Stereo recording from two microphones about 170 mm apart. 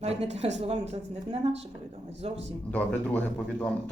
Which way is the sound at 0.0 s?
40° right (ahead or behind).